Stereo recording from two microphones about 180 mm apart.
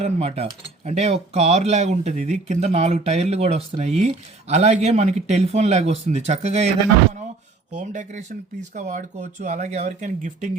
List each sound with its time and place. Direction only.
0.0 s speech: 35° right (ahead or behind)
7.7 s speech: 45° right (ahead or behind)